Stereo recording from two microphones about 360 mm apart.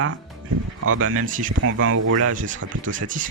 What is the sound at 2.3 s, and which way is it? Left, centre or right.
Speech, right.